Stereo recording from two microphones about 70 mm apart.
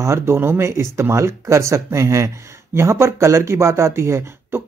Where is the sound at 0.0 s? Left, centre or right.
Right.